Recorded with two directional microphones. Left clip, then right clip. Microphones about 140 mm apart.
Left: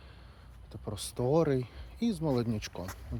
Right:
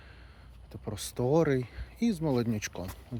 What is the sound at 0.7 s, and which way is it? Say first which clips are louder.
Speech: right 1 dB; 35° right (ahead or behind).